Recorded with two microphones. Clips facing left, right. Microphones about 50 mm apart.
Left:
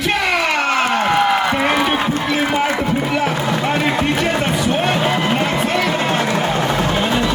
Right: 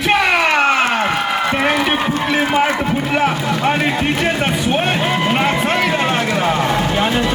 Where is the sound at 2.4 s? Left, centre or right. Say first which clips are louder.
Right 3 dB; centre.